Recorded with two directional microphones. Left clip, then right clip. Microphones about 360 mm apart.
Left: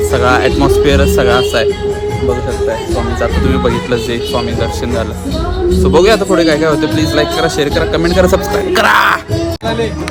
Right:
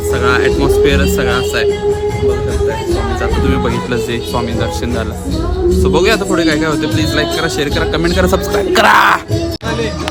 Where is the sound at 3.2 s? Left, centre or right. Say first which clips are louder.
Left 2 dB; centre.